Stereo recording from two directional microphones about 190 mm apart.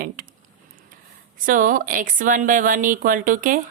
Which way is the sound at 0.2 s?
45° right (ahead or behind).